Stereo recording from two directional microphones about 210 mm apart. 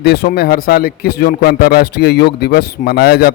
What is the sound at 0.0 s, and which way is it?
Speech, 50° left (ahead or behind).